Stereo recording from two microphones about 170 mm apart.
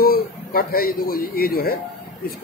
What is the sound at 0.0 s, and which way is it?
A man's voice, 60° left (ahead or behind).